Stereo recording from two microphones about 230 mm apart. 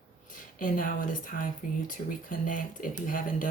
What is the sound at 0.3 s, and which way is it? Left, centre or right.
Speech, left.